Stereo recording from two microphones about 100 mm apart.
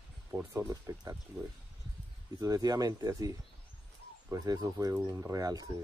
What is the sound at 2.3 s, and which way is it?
Speech, 40° right (ahead or behind).